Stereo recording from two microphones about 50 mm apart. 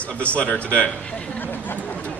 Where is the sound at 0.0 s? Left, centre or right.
Left.